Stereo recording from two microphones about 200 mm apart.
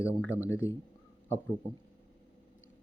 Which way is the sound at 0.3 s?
15° left (ahead or behind).